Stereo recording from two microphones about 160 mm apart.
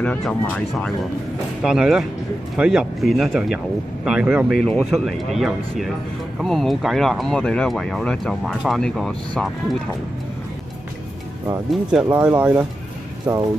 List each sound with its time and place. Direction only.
0.0 s speech: 5° left (ahead or behind)
12.1 s speech: 20° right (ahead or behind)